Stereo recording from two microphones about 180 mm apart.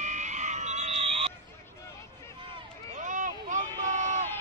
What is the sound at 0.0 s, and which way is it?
Frog, 40° right (ahead or behind).